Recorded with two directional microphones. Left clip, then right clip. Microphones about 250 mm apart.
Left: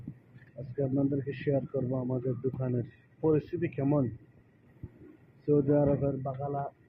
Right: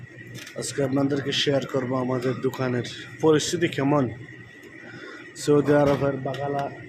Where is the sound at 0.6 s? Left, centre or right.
Right.